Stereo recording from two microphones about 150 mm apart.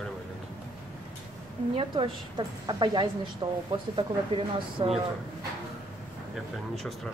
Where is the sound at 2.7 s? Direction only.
30° right (ahead or behind).